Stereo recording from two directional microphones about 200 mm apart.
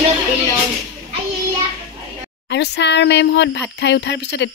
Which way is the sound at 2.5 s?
60° left (ahead or behind).